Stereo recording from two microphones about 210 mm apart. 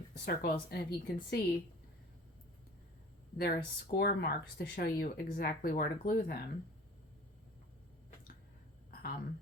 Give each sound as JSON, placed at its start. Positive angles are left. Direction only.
{"t": 0.3, "sound": "speech", "side_deg": 50}
{"t": 3.3, "sound": "speech", "side_deg": 45}
{"t": 8.9, "sound": "a sound", "side_deg": 50}